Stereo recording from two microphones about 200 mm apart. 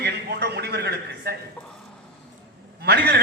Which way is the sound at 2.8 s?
55° right (ahead or behind).